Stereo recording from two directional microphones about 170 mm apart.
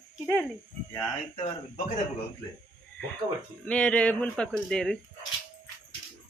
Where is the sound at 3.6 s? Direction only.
5° left (ahead or behind).